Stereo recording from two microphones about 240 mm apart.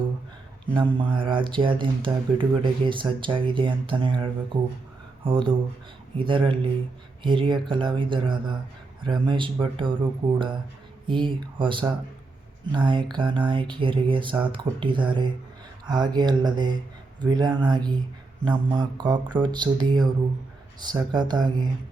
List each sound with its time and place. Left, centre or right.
0.7 s speech: centre